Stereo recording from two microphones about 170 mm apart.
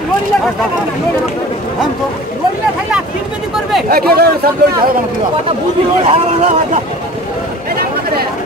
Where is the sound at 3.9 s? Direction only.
65° right (ahead or behind).